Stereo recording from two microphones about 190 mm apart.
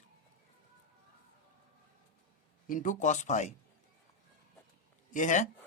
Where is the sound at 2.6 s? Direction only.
45° left (ahead or behind).